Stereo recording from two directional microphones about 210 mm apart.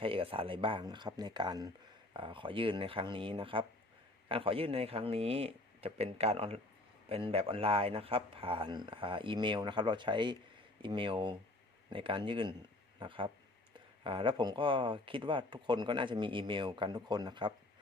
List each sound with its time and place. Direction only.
0.0 s speech: 25° right (ahead or behind)